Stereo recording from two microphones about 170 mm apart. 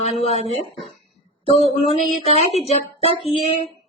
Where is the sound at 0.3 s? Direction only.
40° left (ahead or behind).